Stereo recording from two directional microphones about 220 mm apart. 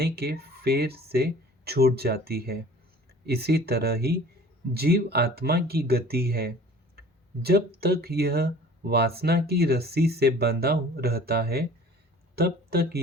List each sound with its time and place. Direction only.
0.0 s speech: 45° right (ahead or behind)
7.8 s speech: 45° right (ahead or behind)